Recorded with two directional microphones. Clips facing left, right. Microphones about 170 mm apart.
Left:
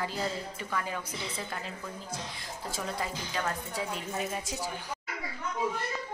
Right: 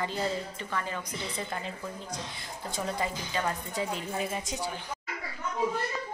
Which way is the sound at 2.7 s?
Centre (ahead or behind).